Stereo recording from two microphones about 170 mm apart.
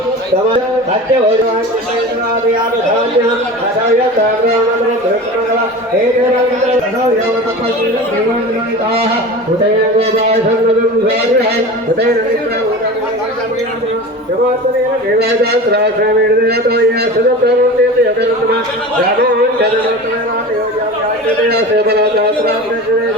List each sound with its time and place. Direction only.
16.5 s a man's voice: 70° right (ahead or behind)
21.5 s a man's voice: 70° right (ahead or behind)